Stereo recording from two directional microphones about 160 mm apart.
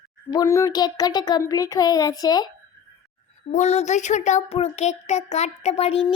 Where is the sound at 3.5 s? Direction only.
45° left (ahead or behind).